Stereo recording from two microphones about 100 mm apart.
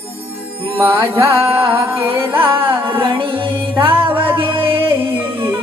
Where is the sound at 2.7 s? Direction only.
60° right (ahead or behind).